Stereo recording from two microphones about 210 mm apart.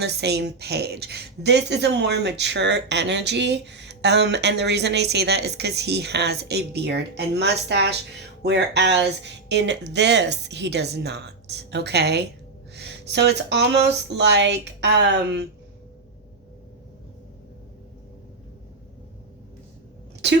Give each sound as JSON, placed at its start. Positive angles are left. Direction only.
{"t": 0.0, "sound": "speech", "side_deg": -50}
{"t": 20.2, "sound": "speech", "side_deg": -55}